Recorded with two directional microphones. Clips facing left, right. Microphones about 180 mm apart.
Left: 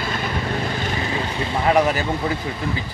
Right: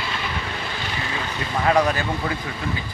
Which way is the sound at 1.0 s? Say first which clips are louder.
Left 4 dB; 25° left (ahead or behind).